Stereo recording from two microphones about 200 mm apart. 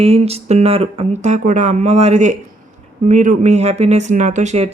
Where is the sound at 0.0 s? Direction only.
30° right (ahead or behind).